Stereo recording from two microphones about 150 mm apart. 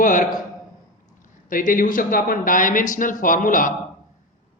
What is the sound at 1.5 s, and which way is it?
Speech, 65° left (ahead or behind).